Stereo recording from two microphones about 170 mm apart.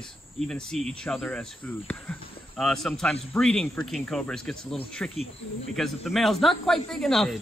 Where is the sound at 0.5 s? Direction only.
5° left (ahead or behind).